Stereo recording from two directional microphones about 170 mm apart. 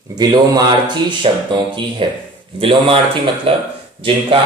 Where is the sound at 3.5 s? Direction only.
35° right (ahead or behind).